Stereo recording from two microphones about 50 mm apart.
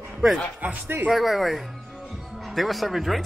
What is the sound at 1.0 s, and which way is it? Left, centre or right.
A man's voice, centre.